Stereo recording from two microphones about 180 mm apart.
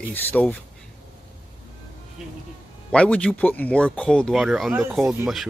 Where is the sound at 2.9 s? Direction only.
5° left (ahead or behind).